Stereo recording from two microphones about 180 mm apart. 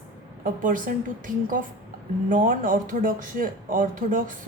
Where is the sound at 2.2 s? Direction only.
50° right (ahead or behind).